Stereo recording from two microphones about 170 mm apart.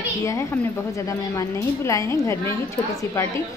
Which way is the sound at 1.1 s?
20° left (ahead or behind).